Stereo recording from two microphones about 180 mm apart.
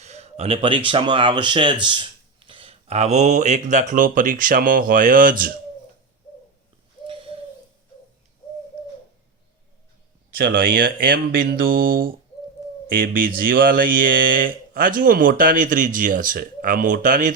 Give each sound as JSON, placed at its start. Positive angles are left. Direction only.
{"t": 0.0, "sound": "speech", "side_deg": -35}
{"t": 10.3, "sound": "speech", "side_deg": -55}